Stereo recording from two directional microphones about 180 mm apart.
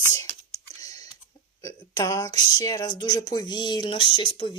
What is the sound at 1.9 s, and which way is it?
Speech, 20° left (ahead or behind).